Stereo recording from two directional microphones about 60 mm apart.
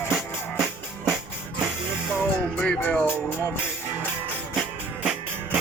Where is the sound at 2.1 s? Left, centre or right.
Left.